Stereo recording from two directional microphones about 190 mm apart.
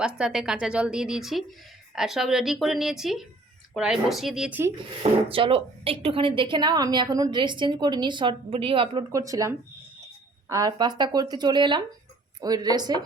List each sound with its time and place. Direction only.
0.0 s speech: 5° right (ahead or behind)
5.3 s a woman's voice: 30° right (ahead or behind)
9.1 s a woman's voice: 15° right (ahead or behind)